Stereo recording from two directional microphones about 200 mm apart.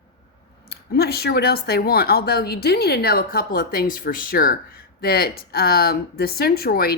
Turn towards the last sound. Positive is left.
turn(degrees=50)  # may be behind; listen again after turning